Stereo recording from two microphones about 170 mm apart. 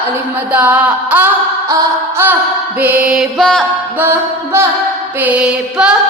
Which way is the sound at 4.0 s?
15° right (ahead or behind).